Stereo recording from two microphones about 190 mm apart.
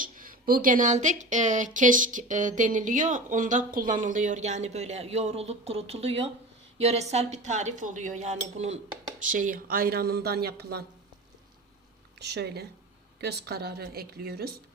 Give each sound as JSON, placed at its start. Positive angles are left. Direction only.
{"t": 0.0, "sound": "speech", "side_deg": -45}
{"t": 12.2, "sound": "speech", "side_deg": -60}